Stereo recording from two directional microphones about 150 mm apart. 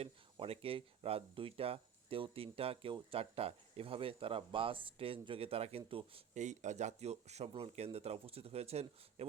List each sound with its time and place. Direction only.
0.0 s speech: 40° right (ahead or behind)
6.3 s speech: 50° right (ahead or behind)